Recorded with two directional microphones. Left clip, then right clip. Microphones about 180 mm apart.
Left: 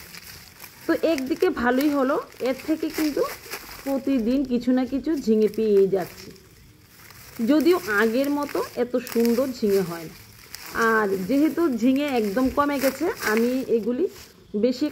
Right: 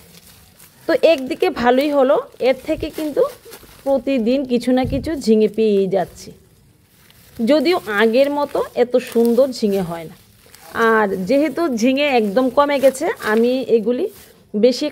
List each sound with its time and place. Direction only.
0.8 s speech: 45° right (ahead or behind)
3.9 s speech: 40° right (ahead or behind)
7.4 s speech: 40° right (ahead or behind)